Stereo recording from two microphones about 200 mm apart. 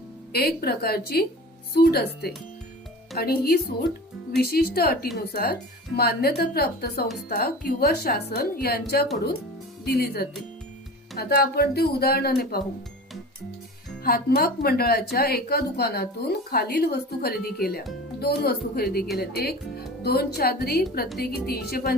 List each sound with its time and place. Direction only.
0.3 s speech: 50° left (ahead or behind)
14.0 s speech: 50° left (ahead or behind)